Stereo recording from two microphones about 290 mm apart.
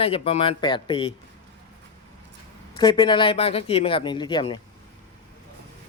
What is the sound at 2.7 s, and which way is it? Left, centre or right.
Speech, centre.